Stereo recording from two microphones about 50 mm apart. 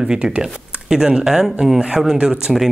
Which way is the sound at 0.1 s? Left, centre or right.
Centre.